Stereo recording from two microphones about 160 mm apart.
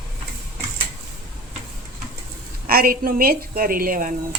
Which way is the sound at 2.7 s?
65° right (ahead or behind).